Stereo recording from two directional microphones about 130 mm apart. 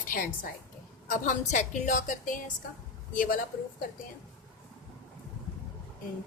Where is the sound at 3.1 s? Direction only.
90° left.